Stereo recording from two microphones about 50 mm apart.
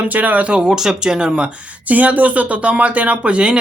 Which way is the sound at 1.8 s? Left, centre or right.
Right.